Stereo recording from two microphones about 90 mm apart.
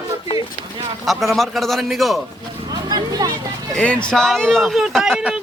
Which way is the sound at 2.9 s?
50° right (ahead or behind).